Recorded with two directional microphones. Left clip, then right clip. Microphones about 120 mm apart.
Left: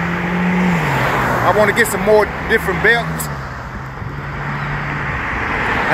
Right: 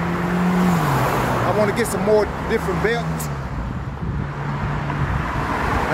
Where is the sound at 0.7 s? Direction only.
45° right (ahead or behind).